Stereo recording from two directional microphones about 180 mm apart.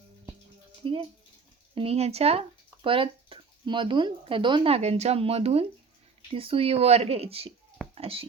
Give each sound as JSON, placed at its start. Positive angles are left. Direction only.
{"t": 1.7, "sound": "a child's voice", "side_deg": -35}